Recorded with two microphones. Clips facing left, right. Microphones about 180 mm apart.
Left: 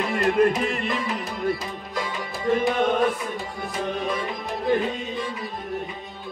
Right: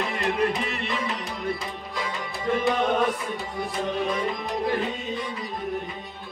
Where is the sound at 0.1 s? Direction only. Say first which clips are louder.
Left 9 dB; 50° left (ahead or behind).